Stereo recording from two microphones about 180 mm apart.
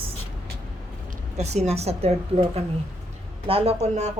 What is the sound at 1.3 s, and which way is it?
Speech, 40° right (ahead or behind).